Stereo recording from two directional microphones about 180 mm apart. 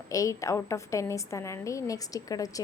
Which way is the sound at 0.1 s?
20° left (ahead or behind).